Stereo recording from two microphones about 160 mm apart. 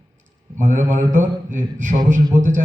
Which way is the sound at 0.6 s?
55° right (ahead or behind).